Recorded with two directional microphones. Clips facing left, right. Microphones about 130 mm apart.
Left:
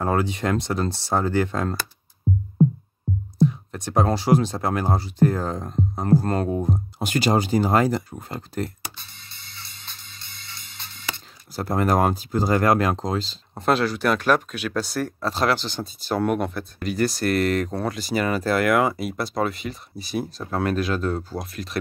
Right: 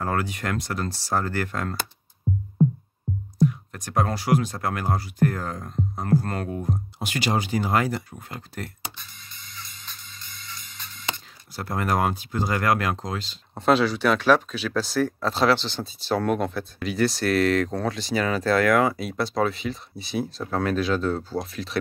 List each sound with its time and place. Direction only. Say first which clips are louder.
0.0 s speech: left 4 dB; 20° left (ahead or behind)
3.3 s speech: left 1 dB; 25° left (ahead or behind)
7.0 s speech: left 5 dB; 45° left (ahead or behind)
8.9 s music: right 1 dB; 30° left (ahead or behind)
11.5 s speech: left 4 dB; 35° left (ahead or behind)
13.6 s speech: right 1 dB; centre (ahead or behind)